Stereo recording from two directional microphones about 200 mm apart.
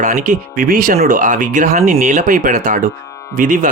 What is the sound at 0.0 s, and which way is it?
Speech, 40° right (ahead or behind).